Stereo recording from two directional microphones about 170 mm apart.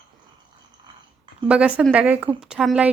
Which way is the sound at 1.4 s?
5° right (ahead or behind).